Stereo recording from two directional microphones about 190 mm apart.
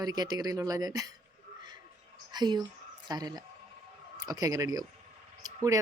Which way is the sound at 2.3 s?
20° right (ahead or behind).